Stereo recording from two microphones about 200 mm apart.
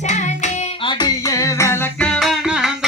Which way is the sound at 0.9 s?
20° left (ahead or behind).